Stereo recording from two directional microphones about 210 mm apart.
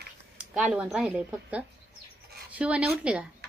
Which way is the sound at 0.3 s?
5° right (ahead or behind).